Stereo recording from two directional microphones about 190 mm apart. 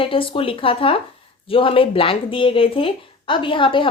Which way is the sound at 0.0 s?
30° left (ahead or behind).